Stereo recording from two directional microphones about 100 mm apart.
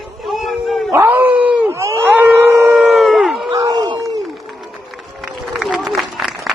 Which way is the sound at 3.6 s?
45° right (ahead or behind).